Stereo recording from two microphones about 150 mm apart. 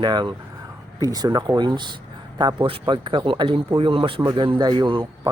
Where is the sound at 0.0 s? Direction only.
30° right (ahead or behind).